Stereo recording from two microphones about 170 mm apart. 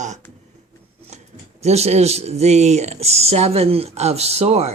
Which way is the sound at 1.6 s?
40° right (ahead or behind).